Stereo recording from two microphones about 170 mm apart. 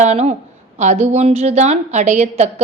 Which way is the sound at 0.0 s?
40° right (ahead or behind).